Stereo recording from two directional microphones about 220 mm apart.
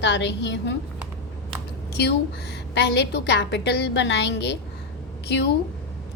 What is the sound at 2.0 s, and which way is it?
A woman's voice, 50° left (ahead or behind).